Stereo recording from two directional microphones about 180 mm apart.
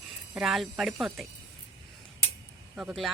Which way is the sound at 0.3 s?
Centre (ahead or behind).